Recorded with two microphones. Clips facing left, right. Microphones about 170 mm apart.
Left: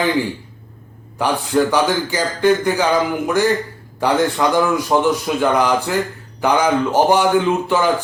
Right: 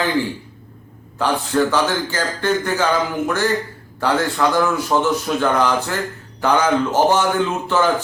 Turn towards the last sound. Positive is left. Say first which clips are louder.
# left 2 dB
turn(degrees=10)  # may be behind; listen again after turning